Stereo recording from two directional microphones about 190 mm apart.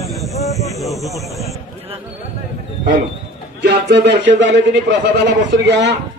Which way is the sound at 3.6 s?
65° right (ahead or behind).